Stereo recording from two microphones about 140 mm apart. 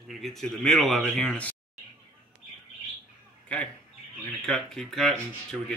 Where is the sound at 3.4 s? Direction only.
10° left (ahead or behind).